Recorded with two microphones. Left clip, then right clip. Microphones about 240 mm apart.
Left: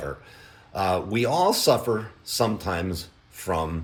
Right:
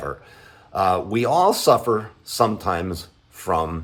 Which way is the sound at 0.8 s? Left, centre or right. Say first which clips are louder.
Right 4 dB; centre.